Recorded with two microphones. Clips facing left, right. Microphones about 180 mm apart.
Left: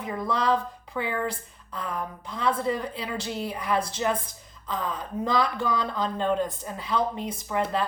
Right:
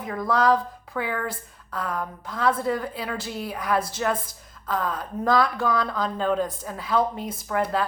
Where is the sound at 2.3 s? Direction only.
5° right (ahead or behind).